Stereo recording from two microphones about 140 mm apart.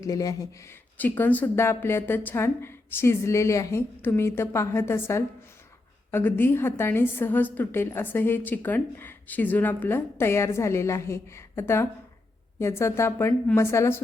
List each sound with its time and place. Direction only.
0.0 s a woman's voice: 25° left (ahead or behind)
0.9 s a woman's voice: 15° left (ahead or behind)